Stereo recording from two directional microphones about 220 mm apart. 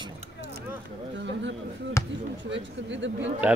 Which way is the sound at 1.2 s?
55° right (ahead or behind).